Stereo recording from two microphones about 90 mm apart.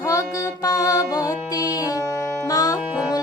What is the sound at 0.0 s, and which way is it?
Music, 40° left (ahead or behind).